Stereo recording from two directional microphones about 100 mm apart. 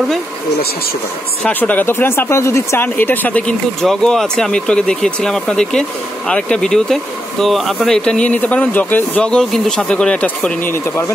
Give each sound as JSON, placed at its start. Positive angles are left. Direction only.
{"t": 1.4, "sound": "speech", "side_deg": 15}
{"t": 10.6, "sound": "speech", "side_deg": 25}